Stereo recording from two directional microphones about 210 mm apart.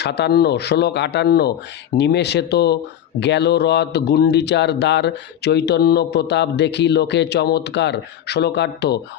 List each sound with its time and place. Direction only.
0.0 s speech: 55° left (ahead or behind)